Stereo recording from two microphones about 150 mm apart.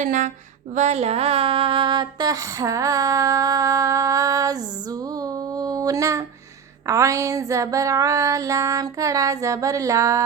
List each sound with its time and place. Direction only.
0.0 s music: 60° right (ahead or behind)
0.7 s speech: 50° right (ahead or behind); by 10.2 s 20° right (ahead or behind)